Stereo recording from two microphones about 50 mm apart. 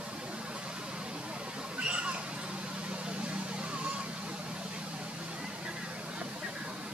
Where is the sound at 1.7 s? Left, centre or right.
Right.